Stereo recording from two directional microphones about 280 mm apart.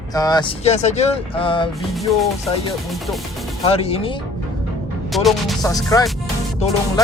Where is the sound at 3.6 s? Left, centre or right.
Left.